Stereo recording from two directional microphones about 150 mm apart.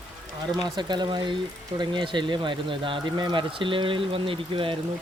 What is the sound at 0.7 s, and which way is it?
Speech, 30° right (ahead or behind).